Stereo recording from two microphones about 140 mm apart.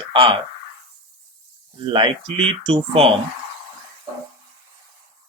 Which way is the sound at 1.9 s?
40° right (ahead or behind).